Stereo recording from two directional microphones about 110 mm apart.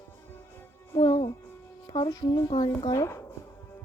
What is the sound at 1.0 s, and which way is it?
Music, 70° left (ahead or behind).